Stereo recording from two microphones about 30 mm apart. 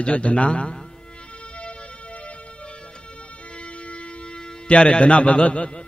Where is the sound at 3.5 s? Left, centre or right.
Left.